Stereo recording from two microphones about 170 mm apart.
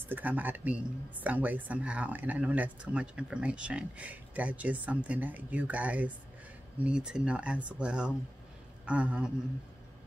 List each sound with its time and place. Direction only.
0.1 s speech: 10° right (ahead or behind)